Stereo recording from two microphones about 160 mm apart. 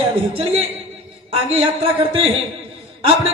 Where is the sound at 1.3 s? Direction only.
35° right (ahead or behind).